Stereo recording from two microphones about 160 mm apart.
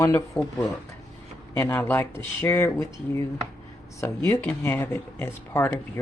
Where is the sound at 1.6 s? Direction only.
10° left (ahead or behind).